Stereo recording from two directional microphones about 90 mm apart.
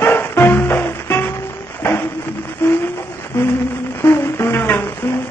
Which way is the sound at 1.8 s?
25° left (ahead or behind).